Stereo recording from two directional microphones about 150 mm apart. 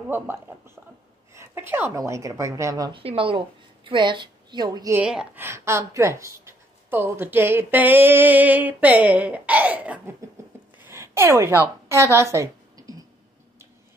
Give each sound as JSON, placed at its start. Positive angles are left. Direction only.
{"t": 0.1, "sound": "a woman's voice", "side_deg": -15}
{"t": 2.9, "sound": "a woman's voice", "side_deg": -40}
{"t": 4.9, "sound": "a woman's voice", "side_deg": -5}
{"t": 10.8, "sound": "a sound", "side_deg": -15}